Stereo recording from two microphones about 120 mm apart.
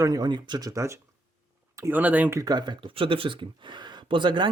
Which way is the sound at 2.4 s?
35° right (ahead or behind).